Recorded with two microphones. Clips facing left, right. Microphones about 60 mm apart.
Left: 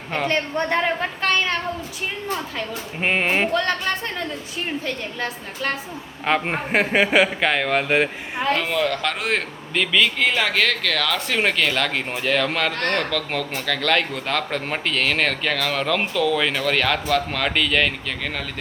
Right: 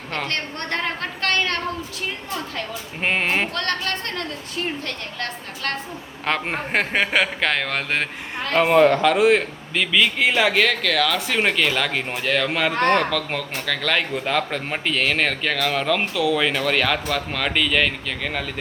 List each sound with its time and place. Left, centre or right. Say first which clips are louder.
0.1 s a woman's voice: left 5 dB; centre
8.5 s a man's voice: right 12 dB; right
9.0 s speech: right 7 dB; centre
12.7 s speech: right 5 dB; right
13.0 s speech: right 1 dB; centre